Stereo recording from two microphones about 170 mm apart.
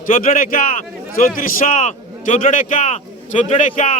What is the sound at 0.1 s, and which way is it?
A man's voice, 55° left (ahead or behind).